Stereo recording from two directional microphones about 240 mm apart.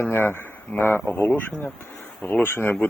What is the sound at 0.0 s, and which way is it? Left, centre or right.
A man's voice, centre.